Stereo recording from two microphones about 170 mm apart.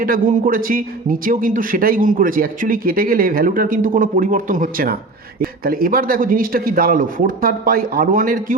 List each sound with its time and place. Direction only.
0.0 s a man's voice: 55° right (ahead or behind)